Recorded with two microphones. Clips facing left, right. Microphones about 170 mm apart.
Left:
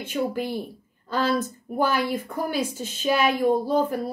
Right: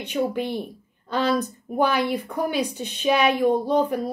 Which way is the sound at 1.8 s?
60° right (ahead or behind).